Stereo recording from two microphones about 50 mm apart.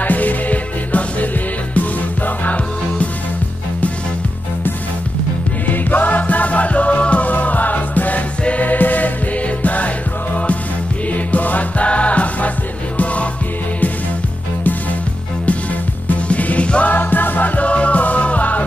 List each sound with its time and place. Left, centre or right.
0.0 s music: left
5.7 s music: left
16.1 s music: left
16.9 s music: left